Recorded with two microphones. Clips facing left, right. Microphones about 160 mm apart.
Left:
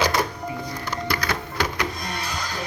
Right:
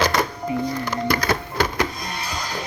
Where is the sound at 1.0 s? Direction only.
45° right (ahead or behind).